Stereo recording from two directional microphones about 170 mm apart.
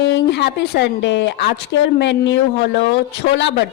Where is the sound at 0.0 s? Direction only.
90° left.